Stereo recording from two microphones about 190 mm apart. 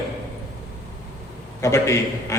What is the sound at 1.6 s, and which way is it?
Speech, 15° left (ahead or behind).